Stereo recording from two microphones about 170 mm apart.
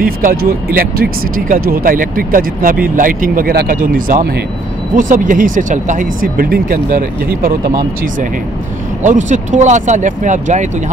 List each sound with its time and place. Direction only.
0.0 s speech: 55° right (ahead or behind)
9.0 s speech: 45° right (ahead or behind)